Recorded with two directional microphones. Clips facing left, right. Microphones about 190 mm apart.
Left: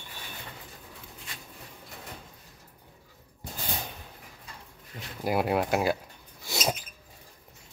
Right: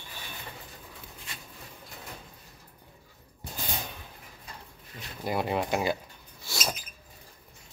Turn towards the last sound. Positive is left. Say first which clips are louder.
# left 4 dB
turn(degrees=20)  # may be behind; listen again after turning